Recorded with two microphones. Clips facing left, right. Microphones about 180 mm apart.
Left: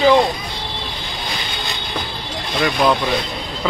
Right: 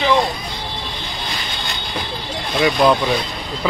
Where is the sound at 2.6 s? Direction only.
Centre (ahead or behind).